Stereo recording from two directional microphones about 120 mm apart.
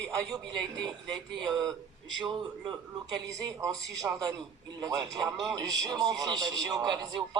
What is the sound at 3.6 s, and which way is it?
A man's voice, 30° right (ahead or behind).